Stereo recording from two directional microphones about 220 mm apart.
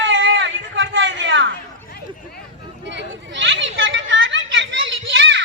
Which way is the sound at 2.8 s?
55° right (ahead or behind).